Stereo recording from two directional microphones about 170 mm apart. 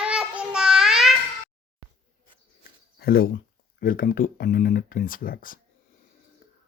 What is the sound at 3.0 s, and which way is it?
Speech, 60° left (ahead or behind).